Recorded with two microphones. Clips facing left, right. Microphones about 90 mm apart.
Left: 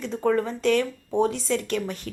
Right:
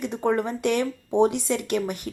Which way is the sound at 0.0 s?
15° right (ahead or behind).